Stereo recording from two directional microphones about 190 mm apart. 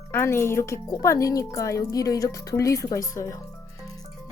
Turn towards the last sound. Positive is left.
turn(degrees=15)  # may be behind; listen again after turning